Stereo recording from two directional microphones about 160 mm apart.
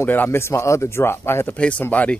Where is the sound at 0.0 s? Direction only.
15° left (ahead or behind).